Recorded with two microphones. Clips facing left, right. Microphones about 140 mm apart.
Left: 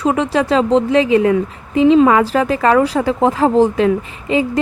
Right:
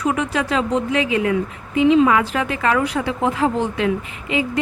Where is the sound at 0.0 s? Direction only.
30° left (ahead or behind).